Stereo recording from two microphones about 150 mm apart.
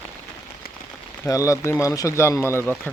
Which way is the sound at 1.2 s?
20° left (ahead or behind).